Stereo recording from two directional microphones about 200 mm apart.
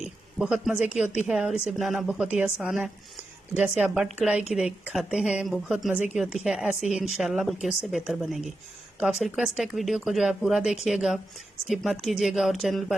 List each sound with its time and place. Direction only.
0.0 s speech: 5° right (ahead or behind)